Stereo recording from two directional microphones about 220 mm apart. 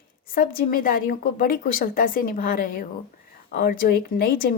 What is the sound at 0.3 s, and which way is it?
A woman's voice, 40° left (ahead or behind).